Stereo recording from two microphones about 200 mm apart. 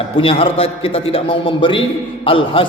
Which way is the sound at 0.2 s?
25° left (ahead or behind).